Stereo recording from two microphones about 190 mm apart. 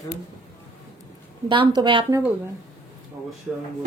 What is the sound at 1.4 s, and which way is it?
Speech, 25° right (ahead or behind).